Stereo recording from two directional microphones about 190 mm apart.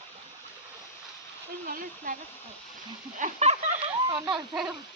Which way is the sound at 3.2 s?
40° right (ahead or behind).